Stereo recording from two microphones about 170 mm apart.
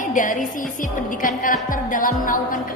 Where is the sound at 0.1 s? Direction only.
50° left (ahead or behind).